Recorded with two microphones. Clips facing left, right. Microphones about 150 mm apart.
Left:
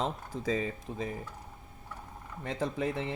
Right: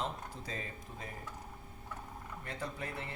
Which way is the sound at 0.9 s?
90° left.